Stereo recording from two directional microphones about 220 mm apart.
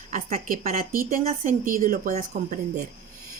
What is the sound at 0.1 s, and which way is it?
Speech, 40° right (ahead or behind).